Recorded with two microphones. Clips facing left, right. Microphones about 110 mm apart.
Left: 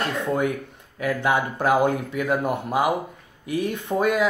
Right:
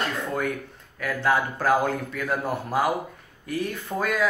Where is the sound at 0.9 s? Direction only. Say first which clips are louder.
Left 2 dB; 20° left (ahead or behind).